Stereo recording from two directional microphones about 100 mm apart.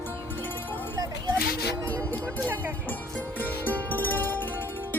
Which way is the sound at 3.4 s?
15° left (ahead or behind).